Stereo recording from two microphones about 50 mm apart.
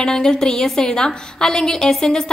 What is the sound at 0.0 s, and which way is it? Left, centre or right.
A woman's voice, centre.